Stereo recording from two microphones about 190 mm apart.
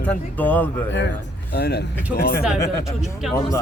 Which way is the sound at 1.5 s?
55° left (ahead or behind).